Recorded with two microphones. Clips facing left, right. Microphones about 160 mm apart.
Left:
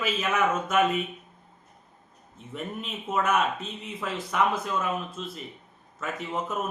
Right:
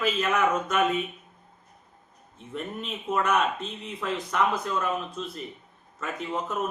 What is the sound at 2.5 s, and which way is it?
Speech, 5° left (ahead or behind).